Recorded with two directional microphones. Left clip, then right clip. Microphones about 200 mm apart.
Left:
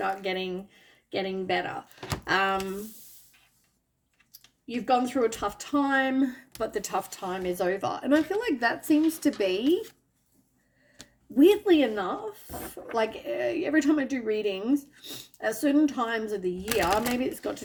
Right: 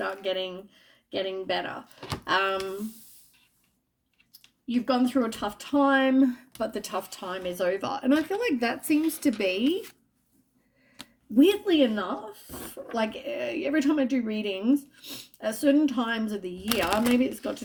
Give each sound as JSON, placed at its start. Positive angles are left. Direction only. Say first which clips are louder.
{"t": 0.0, "sound": "speech", "louder": "even", "side_deg": -25}
{"t": 4.6, "sound": "speech", "louder": "left 1 dB", "side_deg": -20}
{"t": 10.9, "sound": "speech", "louder": "right 3 dB", "side_deg": -25}
{"t": 16.6, "sound": "speech", "louder": "even", "side_deg": -15}
{"t": 17.2, "sound": "speech", "louder": "even", "side_deg": -25}